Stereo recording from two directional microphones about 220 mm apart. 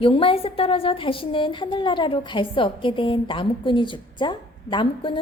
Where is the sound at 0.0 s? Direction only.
25° left (ahead or behind).